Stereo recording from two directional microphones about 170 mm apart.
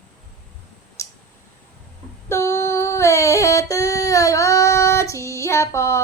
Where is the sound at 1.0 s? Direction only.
20° left (ahead or behind).